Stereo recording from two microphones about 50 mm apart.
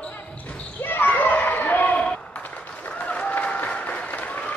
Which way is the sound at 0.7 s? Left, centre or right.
Left.